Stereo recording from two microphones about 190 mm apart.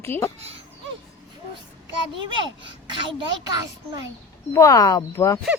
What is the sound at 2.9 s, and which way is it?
Speech, 25° right (ahead or behind).